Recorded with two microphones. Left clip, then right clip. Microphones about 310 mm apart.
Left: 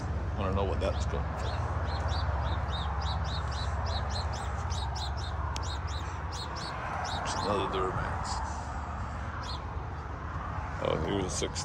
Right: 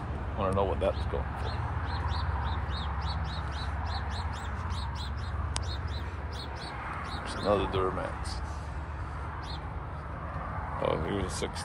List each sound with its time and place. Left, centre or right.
0.4 s speech: centre
7.4 s speech: centre
10.8 s speech: centre